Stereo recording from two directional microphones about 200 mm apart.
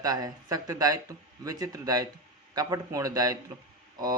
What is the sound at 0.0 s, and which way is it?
Speech, 20° right (ahead or behind).